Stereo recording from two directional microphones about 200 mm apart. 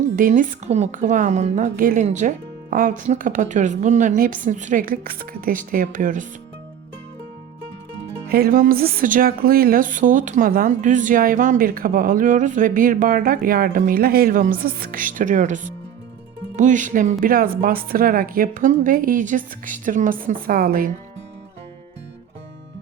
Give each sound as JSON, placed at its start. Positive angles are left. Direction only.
{"t": 0.2, "sound": "a woman's voice", "side_deg": -40}
{"t": 8.3, "sound": "music", "side_deg": -45}